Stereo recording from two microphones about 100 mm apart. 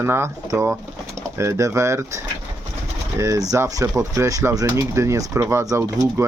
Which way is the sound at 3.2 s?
35° right (ahead or behind).